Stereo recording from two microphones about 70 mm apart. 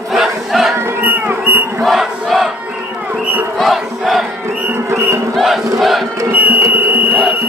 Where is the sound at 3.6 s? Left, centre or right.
Centre.